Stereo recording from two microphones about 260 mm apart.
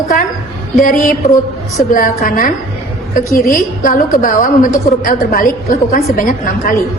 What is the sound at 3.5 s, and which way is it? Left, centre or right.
A woman's voice, left.